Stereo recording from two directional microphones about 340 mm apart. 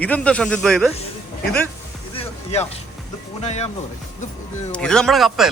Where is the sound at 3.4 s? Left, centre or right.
Centre.